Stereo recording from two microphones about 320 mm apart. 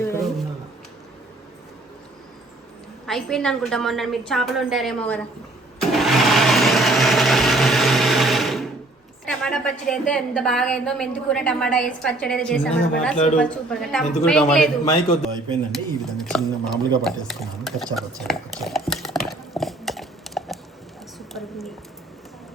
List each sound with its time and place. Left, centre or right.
0.0 s roaring cats: centre
3.1 s a woman's voice: centre
5.9 s blender: centre
9.2 s a woman's voice: centre
13.1 s speech: left
13.4 s a woman's voice: centre
15.7 s a woman's voice: centre
17.9 s a sound: centre